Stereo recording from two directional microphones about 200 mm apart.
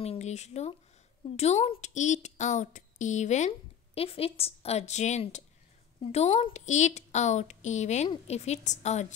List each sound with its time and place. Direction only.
0.0 s a woman's voice: 30° left (ahead or behind)